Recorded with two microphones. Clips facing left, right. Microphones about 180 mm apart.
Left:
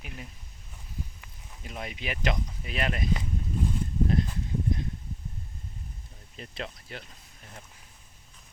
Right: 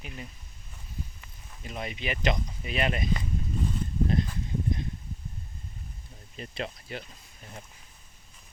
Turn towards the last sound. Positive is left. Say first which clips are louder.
# right 3 dB
turn(degrees=0)  # may be behind; listen again after turning